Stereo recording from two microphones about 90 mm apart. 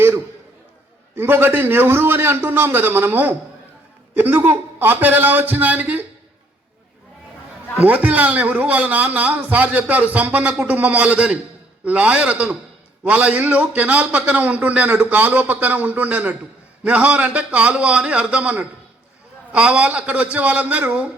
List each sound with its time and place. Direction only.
1.1 s a man's voice: 25° right (ahead or behind)
7.8 s a man's voice: 15° right (ahead or behind)